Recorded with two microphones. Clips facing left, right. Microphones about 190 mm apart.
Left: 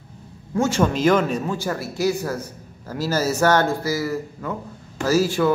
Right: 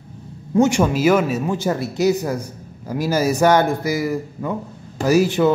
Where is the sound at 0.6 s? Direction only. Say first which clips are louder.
Right 4 dB; 15° right (ahead or behind).